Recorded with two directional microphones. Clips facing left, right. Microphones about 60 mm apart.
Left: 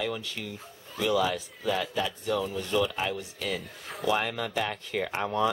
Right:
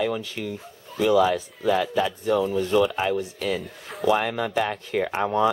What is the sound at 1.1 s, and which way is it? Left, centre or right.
Speech, right.